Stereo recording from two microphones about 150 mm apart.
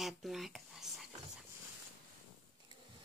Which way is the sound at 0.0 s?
Centre (ahead or behind).